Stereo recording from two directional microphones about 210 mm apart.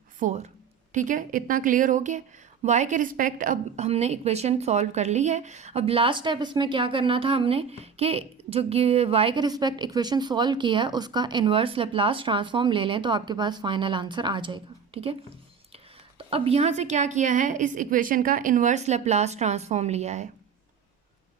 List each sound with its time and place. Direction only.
0.2 s a woman's voice: 35° right (ahead or behind)